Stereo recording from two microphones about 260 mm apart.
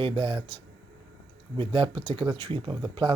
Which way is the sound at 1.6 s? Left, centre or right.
Centre.